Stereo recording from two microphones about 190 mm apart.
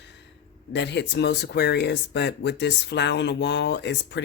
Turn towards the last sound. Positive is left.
turn(degrees=65)  # may be behind; listen again after turning